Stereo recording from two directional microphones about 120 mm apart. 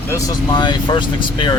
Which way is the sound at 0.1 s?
20° left (ahead or behind).